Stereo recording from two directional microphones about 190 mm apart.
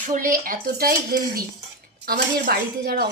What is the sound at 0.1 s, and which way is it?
A woman's voice, 45° right (ahead or behind).